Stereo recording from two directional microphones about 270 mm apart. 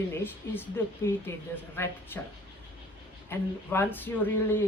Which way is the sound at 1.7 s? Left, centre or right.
Centre.